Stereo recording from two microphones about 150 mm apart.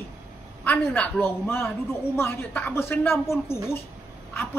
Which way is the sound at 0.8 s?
10° left (ahead or behind).